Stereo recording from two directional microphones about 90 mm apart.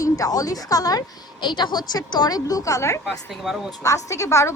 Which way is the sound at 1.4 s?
60° left (ahead or behind).